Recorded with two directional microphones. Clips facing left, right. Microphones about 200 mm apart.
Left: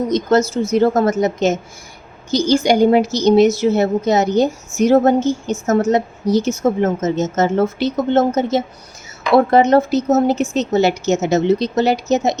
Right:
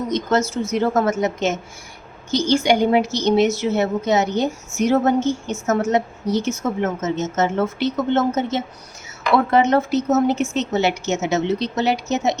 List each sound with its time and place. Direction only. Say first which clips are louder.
0.1 s speech: left 4 dB; 35° left (ahead or behind)